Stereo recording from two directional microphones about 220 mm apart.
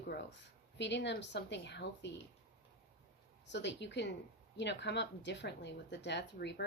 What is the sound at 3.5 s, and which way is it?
Speech, 50° left (ahead or behind).